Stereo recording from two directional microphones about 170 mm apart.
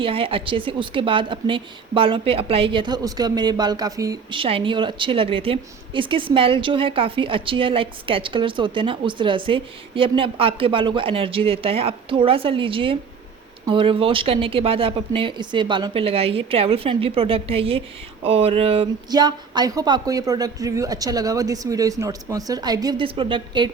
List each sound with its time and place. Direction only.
0.0 s a woman's voice: 30° right (ahead or behind)